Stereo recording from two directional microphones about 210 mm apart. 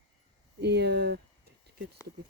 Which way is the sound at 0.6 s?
55° right (ahead or behind).